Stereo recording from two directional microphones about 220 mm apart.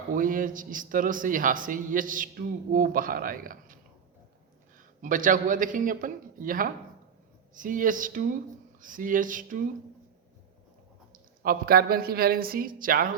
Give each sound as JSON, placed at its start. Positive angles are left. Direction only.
{"t": 0.1, "sound": "a man's voice", "side_deg": -40}
{"t": 4.9, "sound": "a man's voice", "side_deg": -35}
{"t": 11.1, "sound": "a man's voice", "side_deg": -40}